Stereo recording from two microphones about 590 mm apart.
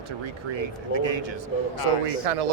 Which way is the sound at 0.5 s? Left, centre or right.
Right.